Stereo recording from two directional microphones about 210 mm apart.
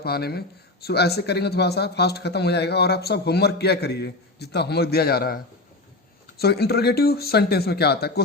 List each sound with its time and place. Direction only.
0.0 s speech: 50° left (ahead or behind)